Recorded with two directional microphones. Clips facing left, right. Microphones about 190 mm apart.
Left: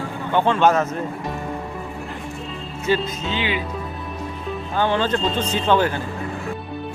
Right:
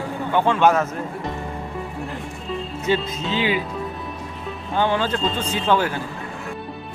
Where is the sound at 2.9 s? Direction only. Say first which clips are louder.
Left 1 dB; 20° right (ahead or behind).